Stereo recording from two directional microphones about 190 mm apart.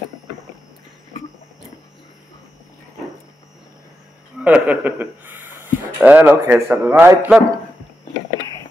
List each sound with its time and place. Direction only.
4.4 s speech: 5° right (ahead or behind)